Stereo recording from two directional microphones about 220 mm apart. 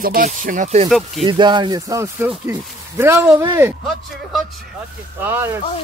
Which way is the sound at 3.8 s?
Centre (ahead or behind).